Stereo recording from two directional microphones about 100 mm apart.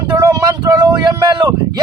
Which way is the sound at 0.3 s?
35° right (ahead or behind).